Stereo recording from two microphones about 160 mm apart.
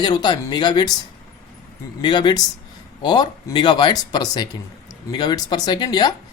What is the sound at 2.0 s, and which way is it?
Speech, 30° left (ahead or behind).